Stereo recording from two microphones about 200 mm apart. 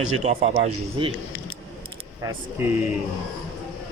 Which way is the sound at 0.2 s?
30° right (ahead or behind).